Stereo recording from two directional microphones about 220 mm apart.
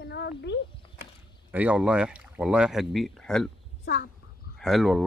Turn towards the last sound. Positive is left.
turn(degrees=0)  # may be behind; listen again after turning